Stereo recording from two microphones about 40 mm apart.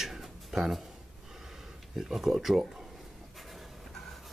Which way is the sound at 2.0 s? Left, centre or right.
Centre.